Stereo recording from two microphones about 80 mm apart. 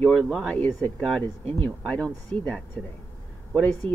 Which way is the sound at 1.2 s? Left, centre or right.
Left.